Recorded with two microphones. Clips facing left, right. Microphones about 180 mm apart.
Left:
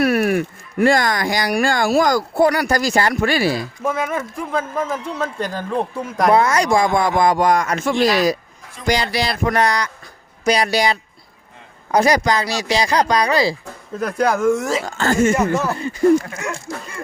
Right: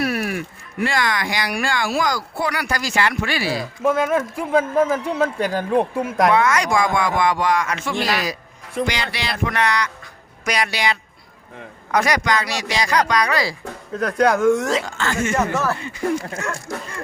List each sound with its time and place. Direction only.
0.0 s speech: 55° left (ahead or behind)
3.8 s a man's voice: centre (ahead or behind)
6.3 s speech: 35° left (ahead or behind)
13.9 s a man's voice: centre (ahead or behind)
14.8 s speech: 40° left (ahead or behind)
15.4 s speech: 15° left (ahead or behind)
15.8 s speech: 40° left (ahead or behind)